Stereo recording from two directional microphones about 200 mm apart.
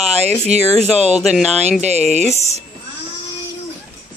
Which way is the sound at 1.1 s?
Centre (ahead or behind).